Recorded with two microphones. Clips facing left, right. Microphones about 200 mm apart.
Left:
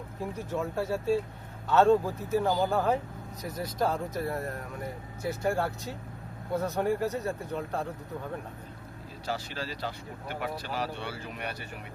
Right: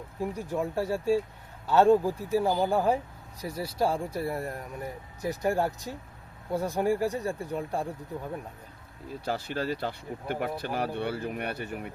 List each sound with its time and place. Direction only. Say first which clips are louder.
0.3 s speech: even; 15° right (ahead or behind)
9.2 s speech: right 4 dB; 55° right (ahead or behind)